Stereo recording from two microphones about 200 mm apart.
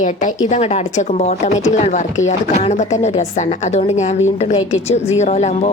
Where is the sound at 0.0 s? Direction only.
40° left (ahead or behind).